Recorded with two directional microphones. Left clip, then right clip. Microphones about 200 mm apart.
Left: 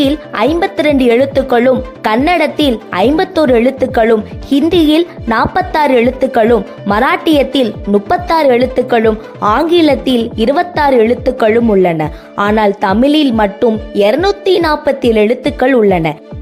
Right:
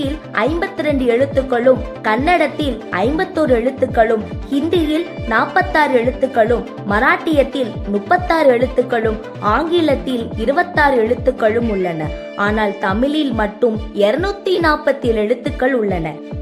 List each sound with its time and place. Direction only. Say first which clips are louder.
0.0 s speech: left 6 dB; 40° left (ahead or behind)